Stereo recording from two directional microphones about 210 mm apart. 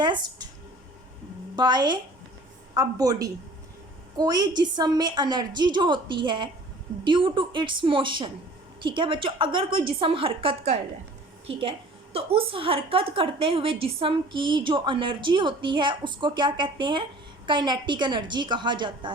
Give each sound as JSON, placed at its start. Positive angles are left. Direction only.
{"t": 0.0, "sound": "a woman's voice", "side_deg": -20}
{"t": 1.5, "sound": "a woman's voice", "side_deg": -20}
{"t": 12.1, "sound": "a woman's voice", "side_deg": -25}